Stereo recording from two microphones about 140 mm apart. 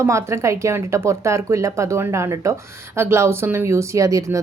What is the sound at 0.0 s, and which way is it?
A woman's voice, 20° right (ahead or behind).